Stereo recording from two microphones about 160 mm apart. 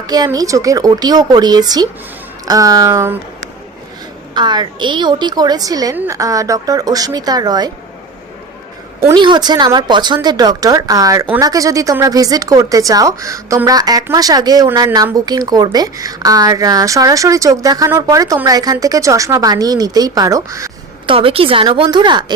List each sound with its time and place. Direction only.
0.1 s speech: 25° right (ahead or behind)
4.4 s speech: 30° right (ahead or behind)
9.1 s speech: 30° right (ahead or behind)
21.1 s a woman's voice: 35° right (ahead or behind)